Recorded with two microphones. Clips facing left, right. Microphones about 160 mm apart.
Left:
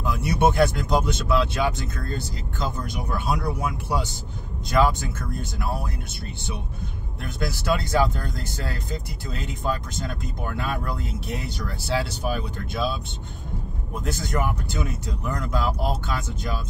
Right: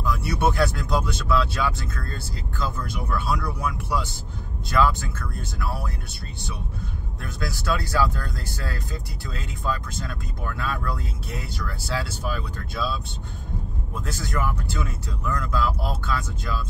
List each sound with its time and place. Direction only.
0.0 s speech: 20° left (ahead or behind)
7.3 s speech: 20° left (ahead or behind)